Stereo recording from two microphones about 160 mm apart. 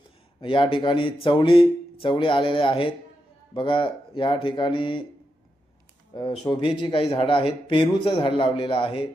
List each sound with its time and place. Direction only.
0.4 s a man's voice: 35° left (ahead or behind)
6.5 s a man's voice: 30° left (ahead or behind)